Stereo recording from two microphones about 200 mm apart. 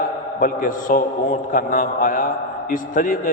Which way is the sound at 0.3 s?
45° left (ahead or behind).